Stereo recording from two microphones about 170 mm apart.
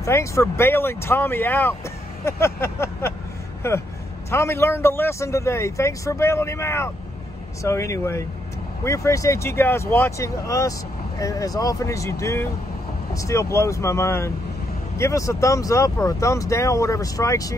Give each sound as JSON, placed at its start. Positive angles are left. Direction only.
{"t": 0.0, "sound": "a man's voice", "side_deg": 15}